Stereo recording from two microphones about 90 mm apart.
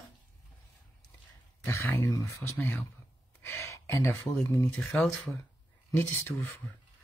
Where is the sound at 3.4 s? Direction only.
30° left (ahead or behind).